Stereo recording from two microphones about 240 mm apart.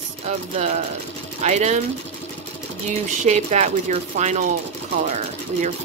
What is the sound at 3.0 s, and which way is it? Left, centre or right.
Speech, right.